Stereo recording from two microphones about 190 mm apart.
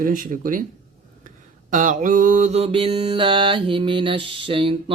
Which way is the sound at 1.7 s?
40° right (ahead or behind).